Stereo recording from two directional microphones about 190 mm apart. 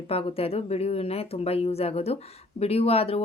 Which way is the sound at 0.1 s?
30° left (ahead or behind).